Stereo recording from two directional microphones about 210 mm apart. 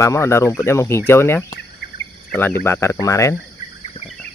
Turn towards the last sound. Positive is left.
turn(degrees=15)  # may be behind; listen again after turning